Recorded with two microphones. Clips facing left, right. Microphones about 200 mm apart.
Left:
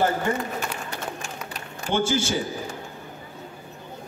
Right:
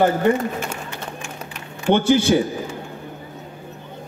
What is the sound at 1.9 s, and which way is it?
Speech, 60° right (ahead or behind).